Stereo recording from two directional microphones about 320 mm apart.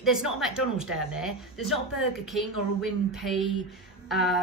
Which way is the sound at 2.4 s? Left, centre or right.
Left.